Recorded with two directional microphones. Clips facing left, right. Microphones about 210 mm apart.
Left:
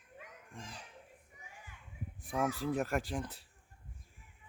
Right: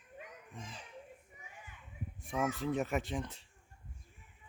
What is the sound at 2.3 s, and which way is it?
Speech, centre (ahead or behind).